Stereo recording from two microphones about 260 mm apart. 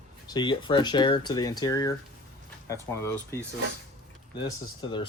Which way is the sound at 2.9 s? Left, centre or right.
Centre.